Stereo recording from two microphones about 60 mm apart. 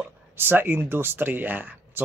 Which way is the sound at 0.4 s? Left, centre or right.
Right.